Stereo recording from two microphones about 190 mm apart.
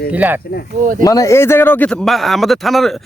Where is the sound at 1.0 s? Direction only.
20° left (ahead or behind).